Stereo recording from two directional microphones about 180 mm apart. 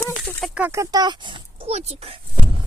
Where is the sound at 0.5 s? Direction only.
10° right (ahead or behind); by 2.4 s 30° right (ahead or behind).